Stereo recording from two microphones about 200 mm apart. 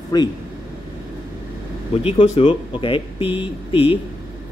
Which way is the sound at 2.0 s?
30° left (ahead or behind).